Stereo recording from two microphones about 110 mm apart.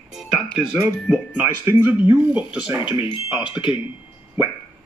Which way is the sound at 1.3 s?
20° right (ahead or behind).